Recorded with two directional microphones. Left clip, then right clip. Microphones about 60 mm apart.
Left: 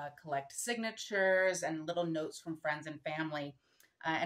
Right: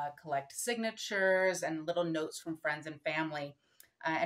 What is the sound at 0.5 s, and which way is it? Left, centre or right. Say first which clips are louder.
Speech: right 2 dB; right.